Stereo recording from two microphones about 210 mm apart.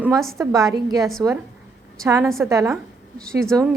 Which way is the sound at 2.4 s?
15° right (ahead or behind).